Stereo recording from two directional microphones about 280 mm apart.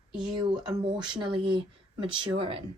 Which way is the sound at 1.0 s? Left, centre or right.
Centre.